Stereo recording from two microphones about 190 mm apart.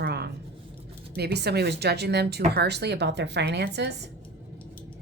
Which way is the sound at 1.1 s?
60° right (ahead or behind).